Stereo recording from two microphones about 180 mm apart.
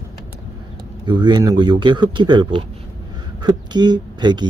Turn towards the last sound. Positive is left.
turn(degrees=-25)  # may be behind; listen again after turning